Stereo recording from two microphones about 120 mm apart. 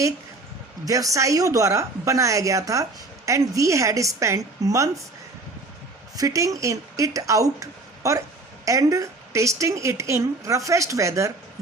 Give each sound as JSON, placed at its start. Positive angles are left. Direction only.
{"t": 0.9, "sound": "a woman's voice", "side_deg": -30}
{"t": 6.1, "sound": "a woman's voice", "side_deg": -30}